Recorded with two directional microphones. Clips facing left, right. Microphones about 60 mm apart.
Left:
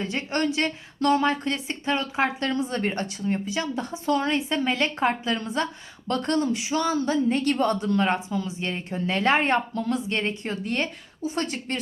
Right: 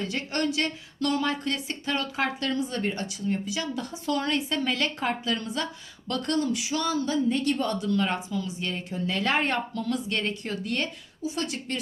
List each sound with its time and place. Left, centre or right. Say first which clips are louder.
0.0 s a woman's voice: left 2 dB; left
2.4 s a woman's voice: left 2 dB; left